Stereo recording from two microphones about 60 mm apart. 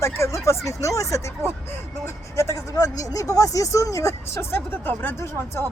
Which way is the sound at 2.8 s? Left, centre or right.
Left.